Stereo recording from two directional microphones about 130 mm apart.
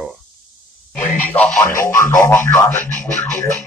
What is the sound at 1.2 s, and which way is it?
Speech, 10° left (ahead or behind).